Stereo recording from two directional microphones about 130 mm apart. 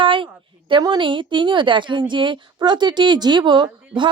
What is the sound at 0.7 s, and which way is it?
Speech, 35° right (ahead or behind).